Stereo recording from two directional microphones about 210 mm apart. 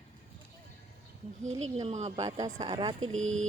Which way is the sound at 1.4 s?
30° right (ahead or behind).